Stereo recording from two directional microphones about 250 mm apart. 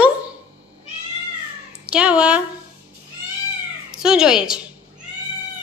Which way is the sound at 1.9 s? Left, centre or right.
Centre.